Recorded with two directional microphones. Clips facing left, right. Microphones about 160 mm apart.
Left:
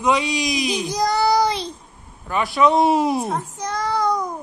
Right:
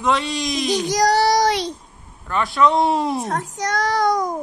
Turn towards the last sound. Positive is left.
turn(degrees=-90)